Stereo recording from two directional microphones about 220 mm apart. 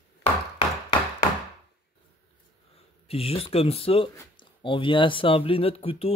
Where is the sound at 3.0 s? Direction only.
25° left (ahead or behind).